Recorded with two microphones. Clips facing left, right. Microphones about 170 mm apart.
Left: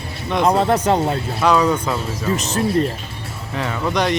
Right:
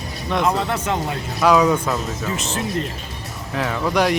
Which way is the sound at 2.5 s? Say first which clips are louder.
Left 5 dB; 35° left (ahead or behind).